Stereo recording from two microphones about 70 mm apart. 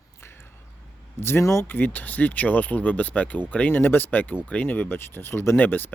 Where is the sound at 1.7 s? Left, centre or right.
Left.